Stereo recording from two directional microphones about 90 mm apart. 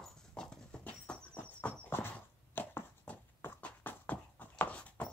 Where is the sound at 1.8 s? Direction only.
25° left (ahead or behind).